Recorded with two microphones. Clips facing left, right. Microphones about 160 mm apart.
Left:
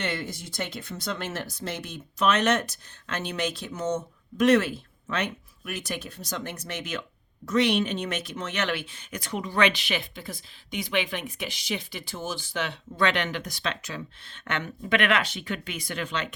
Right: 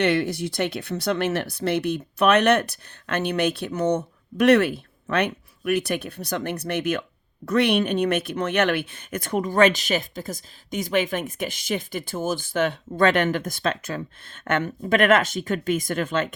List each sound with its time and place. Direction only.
0.0 s speech: 65° right (ahead or behind); by 16.3 s 50° right (ahead or behind)